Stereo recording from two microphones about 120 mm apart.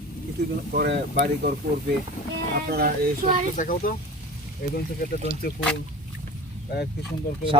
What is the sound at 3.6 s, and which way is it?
Speech, 90° left.